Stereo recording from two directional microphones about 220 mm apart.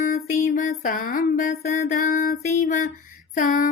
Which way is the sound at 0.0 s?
35° left (ahead or behind).